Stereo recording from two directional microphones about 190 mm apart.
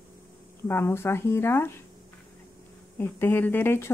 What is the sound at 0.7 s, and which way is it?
Speech, 15° left (ahead or behind).